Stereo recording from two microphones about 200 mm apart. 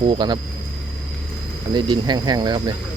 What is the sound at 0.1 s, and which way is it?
Speech, 20° right (ahead or behind).